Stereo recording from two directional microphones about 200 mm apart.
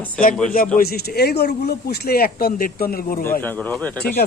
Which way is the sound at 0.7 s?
50° left (ahead or behind).